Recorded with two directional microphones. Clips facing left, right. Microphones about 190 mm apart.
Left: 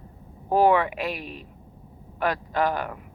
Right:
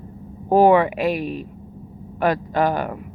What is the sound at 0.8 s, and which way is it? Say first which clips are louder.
Speech: right 8 dB; 5° right (ahead or behind).